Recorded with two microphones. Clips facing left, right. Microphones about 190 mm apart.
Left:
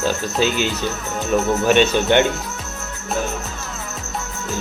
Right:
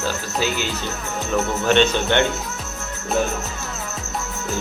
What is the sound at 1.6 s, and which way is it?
Speech, 10° left (ahead or behind).